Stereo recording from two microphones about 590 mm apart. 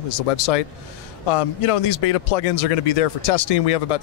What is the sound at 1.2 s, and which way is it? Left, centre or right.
A man's voice, left.